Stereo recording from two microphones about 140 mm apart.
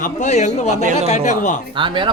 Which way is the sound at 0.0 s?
60° left (ahead or behind).